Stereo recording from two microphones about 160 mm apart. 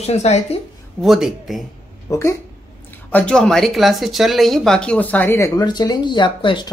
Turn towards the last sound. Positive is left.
turn(degrees=30)  # may be behind; listen again after turning